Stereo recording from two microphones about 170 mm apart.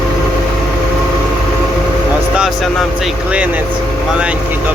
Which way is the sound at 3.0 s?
5° right (ahead or behind).